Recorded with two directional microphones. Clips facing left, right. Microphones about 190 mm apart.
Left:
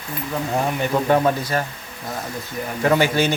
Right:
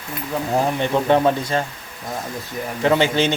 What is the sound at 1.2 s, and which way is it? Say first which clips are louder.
Speech: right 1 dB; 20° right (ahead or behind).